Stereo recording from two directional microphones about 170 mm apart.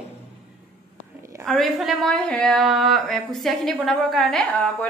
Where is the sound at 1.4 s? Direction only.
Centre (ahead or behind).